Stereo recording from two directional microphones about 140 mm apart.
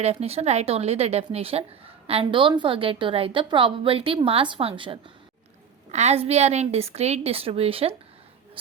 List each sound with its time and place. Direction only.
0.0 s a woman's voice: 50° right (ahead or behind)
5.9 s a woman's voice: 55° right (ahead or behind)